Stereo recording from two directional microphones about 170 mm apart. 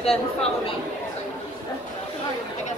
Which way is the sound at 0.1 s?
35° left (ahead or behind).